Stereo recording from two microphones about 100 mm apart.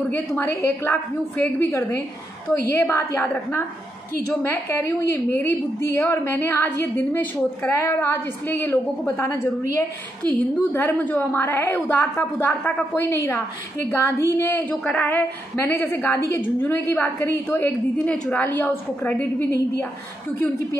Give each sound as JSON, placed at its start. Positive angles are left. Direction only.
{"t": 0.1, "sound": "a woman's voice", "side_deg": 25}
{"t": 4.4, "sound": "a woman's voice", "side_deg": 25}
{"t": 7.7, "sound": "a woman's voice", "side_deg": 30}